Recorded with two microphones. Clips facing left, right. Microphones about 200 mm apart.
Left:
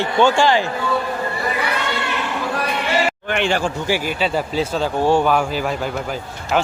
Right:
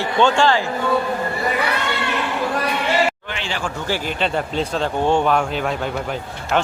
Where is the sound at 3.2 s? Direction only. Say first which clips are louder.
Left 9 dB; 55° left (ahead or behind).